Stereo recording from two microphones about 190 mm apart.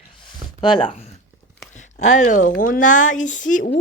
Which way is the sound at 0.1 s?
25° left (ahead or behind).